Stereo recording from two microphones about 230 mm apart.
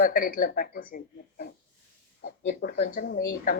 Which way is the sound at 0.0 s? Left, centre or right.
Left.